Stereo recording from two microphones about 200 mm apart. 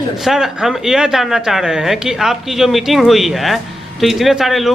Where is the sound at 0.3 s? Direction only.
Centre (ahead or behind).